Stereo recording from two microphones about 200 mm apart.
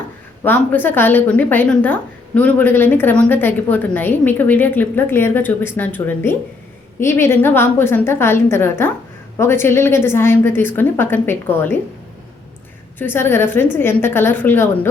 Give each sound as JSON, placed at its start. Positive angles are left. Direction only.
{"t": 0.4, "sound": "a woman's voice", "side_deg": 10}
{"t": 13.0, "sound": "a woman's voice", "side_deg": 10}